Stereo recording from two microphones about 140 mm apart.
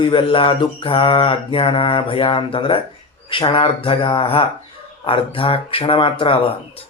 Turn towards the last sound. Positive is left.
turn(degrees=40)  # may be behind; listen again after turning